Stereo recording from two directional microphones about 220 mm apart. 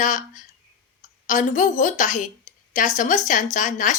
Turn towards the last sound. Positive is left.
turn(degrees=35)  # may be behind; listen again after turning